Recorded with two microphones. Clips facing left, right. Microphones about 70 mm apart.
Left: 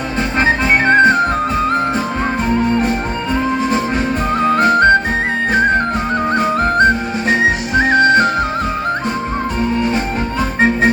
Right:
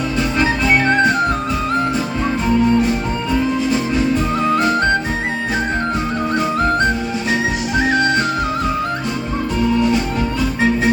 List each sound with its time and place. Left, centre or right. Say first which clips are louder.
0.2 s music: left 3 dB; left
2.5 s music: right 2 dB; left
6.3 s music: left 2 dB; left
9.7 s music: right 2 dB; left